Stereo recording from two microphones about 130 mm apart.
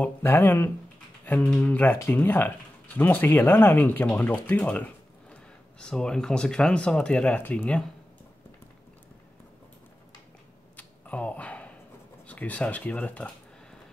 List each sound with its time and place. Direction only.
0.0 s speech: 15° left (ahead or behind)
10.8 s a sound: 10° left (ahead or behind)
12.3 s speech: 10° left (ahead or behind)